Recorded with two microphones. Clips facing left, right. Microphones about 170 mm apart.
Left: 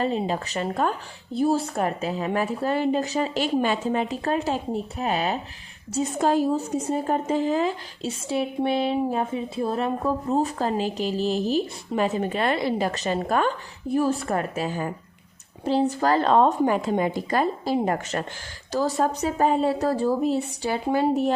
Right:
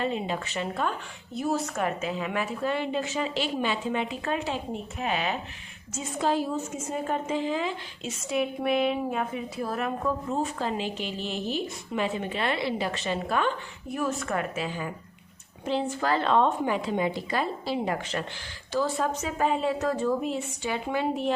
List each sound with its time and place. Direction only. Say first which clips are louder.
0.0 s a woman's voice: left 4 dB; 40° left (ahead or behind)
13.9 s a woman's voice: left 6 dB; 35° left (ahead or behind)